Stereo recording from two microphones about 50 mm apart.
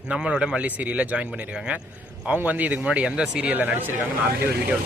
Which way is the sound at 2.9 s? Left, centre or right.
Centre.